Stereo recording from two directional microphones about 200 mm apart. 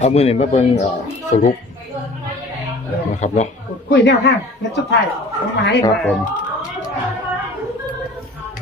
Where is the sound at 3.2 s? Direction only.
35° left (ahead or behind).